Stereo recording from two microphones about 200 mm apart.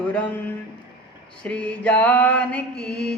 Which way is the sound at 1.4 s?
5° left (ahead or behind).